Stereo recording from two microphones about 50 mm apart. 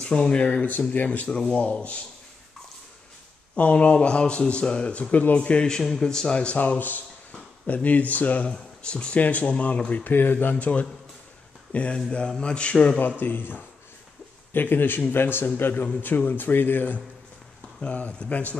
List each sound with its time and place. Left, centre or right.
0.0 s speech: centre
1.3 s speech: centre
3.5 s speech: left; by 6.4 s centre
6.4 s speech: left
8.5 s speech: centre
9.2 s speech: left
10.0 s speech: left
10.5 s speech: left
13.2 s speech: left
15.4 s speech: left
17.7 s speech: left